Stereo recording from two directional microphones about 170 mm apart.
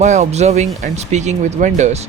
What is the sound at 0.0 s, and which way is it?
Speech, 45° right (ahead or behind).